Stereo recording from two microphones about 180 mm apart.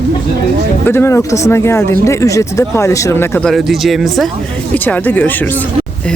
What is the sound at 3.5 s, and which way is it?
Speech, centre (ahead or behind).